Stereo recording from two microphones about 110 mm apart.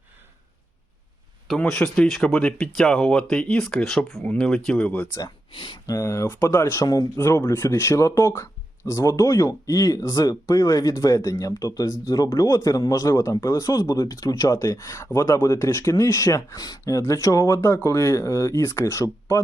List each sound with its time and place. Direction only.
1.5 s speech: 5° left (ahead or behind)
5.5 s speech: 50° left (ahead or behind)
5.8 s speech: 30° left (ahead or behind)